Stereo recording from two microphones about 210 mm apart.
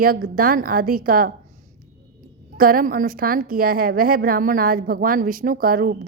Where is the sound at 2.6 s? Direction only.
40° right (ahead or behind).